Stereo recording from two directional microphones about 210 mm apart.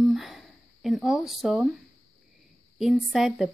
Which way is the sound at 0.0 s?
Centre (ahead or behind).